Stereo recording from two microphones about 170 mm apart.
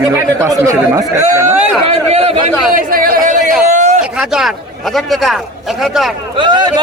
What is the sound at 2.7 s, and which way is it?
Speech, 60° right (ahead or behind).